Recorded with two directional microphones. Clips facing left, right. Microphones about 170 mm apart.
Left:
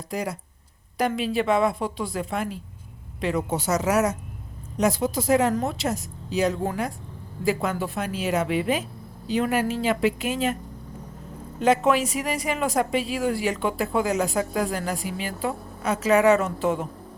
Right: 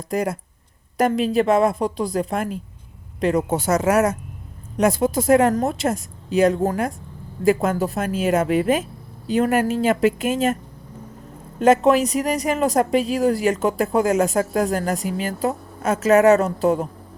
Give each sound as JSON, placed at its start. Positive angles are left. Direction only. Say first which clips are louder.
{"t": 0.1, "sound": "a woman's voice", "louder": "right 7 dB", "side_deg": -50}
{"t": 11.6, "sound": "a woman's voice", "louder": "right 5 dB", "side_deg": -40}